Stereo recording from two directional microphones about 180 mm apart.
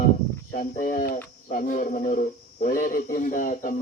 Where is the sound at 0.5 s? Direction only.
50° left (ahead or behind).